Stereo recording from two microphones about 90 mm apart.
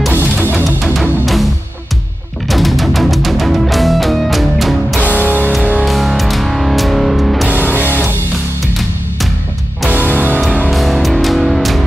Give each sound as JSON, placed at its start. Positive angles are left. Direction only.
{"t": 0.1, "sound": "music", "side_deg": -20}
{"t": 1.2, "sound": "music", "side_deg": 0}
{"t": 2.5, "sound": "music", "side_deg": 0}
{"t": 5.1, "sound": "music", "side_deg": -20}
{"t": 5.5, "sound": "music", "side_deg": 10}
{"t": 10.0, "sound": "music", "side_deg": -15}
{"t": 10.7, "sound": "music", "side_deg": 0}